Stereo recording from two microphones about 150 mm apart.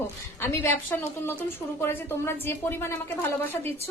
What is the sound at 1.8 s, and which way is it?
A woman's voice, 15° left (ahead or behind).